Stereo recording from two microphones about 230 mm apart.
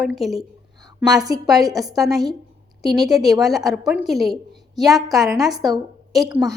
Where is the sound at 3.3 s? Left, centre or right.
Centre.